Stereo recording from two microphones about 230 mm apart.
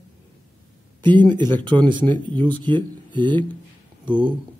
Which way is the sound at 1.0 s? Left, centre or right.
Centre.